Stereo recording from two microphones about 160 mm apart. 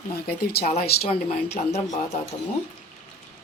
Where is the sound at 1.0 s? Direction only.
40° left (ahead or behind).